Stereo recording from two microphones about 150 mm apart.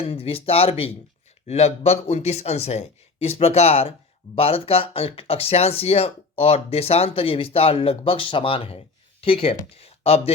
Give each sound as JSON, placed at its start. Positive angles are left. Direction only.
{"t": 0.0, "sound": "speech", "side_deg": 40}